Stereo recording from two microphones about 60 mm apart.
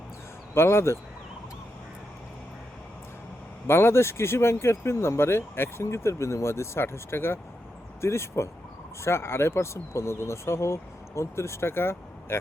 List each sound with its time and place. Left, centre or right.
0.5 s speech: left
3.7 s speech: left